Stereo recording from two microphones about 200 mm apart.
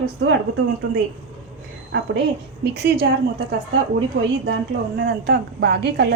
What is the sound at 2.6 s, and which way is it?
A woman's voice, 55° right (ahead or behind).